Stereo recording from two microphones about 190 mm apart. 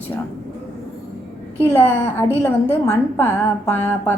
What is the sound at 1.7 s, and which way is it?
A woman's voice, 10° left (ahead or behind).